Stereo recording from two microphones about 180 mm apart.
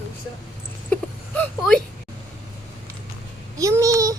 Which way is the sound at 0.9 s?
10° left (ahead or behind).